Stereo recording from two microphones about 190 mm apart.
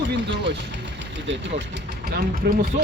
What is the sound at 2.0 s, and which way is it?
Speech, 55° right (ahead or behind).